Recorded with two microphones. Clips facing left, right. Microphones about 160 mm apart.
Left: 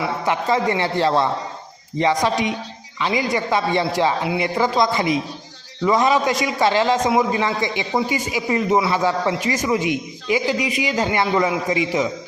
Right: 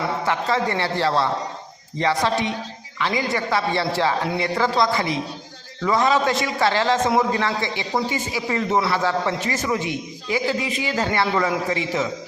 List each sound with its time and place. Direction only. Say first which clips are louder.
0.0 s a man's voice: left 1 dB; 15° left (ahead or behind)